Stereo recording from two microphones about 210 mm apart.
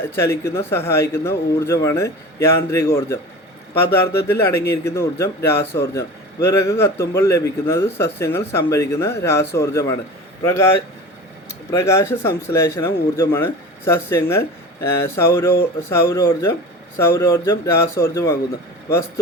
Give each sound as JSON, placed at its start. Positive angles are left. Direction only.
{"t": 0.0, "sound": "a man's voice", "side_deg": 10}